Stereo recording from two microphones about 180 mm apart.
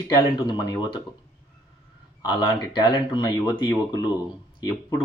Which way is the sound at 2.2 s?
25° left (ahead or behind).